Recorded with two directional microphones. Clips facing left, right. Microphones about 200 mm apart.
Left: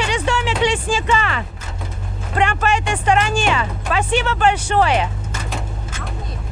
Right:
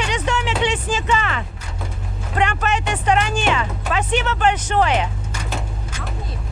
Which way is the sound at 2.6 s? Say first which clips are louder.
Left 2 dB; 10° left (ahead or behind).